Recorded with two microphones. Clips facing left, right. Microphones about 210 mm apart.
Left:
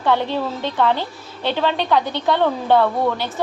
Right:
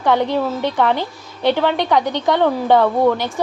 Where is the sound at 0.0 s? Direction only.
15° right (ahead or behind).